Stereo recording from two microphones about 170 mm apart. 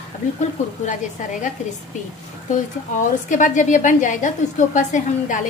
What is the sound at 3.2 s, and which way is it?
A woman's voice, 50° left (ahead or behind).